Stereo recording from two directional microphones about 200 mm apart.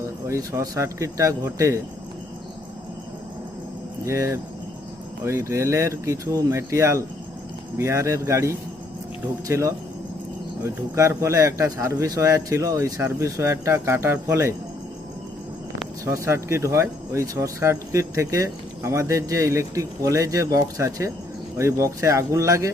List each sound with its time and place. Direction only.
0.3 s speech: 15° right (ahead or behind)
4.0 s speech: 15° right (ahead or behind)
16.0 s speech: 15° right (ahead or behind)